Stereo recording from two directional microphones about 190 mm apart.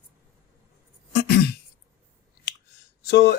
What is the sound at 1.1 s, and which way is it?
Throat clearing, 55° left (ahead or behind).